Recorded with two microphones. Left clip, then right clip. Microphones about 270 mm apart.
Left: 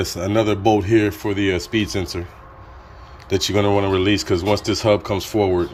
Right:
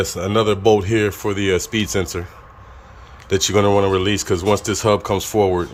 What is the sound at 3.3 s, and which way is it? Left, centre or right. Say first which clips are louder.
Speech: right 3 dB; centre.